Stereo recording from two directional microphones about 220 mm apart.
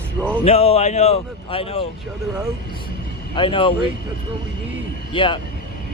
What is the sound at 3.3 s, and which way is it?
Speech, 25° left (ahead or behind).